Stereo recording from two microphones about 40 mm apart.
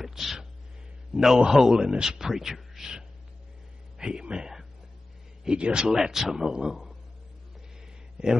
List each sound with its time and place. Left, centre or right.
0.0 s a sound: centre
1.1 s a man's voice: centre
4.0 s speech: right
5.9 s speech: centre